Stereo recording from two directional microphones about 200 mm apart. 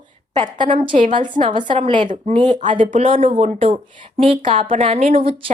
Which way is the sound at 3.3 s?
30° right (ahead or behind).